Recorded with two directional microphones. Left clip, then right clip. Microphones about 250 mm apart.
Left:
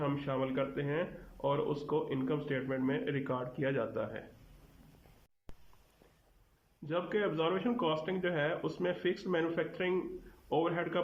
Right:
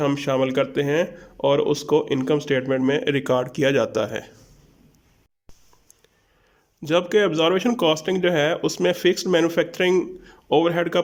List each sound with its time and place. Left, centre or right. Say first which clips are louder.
0.0 s speech: right 14 dB; right
6.8 s speech: right 15 dB; right